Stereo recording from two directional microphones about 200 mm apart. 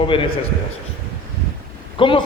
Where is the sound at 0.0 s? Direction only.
25° left (ahead or behind).